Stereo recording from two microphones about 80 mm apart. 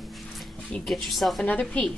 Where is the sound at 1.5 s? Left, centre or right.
Centre.